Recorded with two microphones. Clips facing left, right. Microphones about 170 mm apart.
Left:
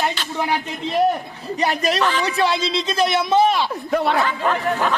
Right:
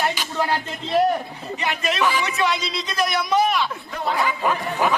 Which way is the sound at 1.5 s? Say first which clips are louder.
Left 5 dB; 35° left (ahead or behind).